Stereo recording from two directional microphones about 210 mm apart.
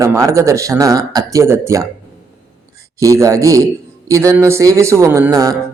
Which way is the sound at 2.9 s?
15° right (ahead or behind).